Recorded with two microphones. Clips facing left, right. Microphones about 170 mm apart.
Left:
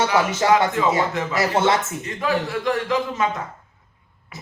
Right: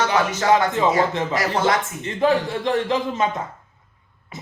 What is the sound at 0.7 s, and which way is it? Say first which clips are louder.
A man's voice: right 1 dB; 25° right (ahead or behind).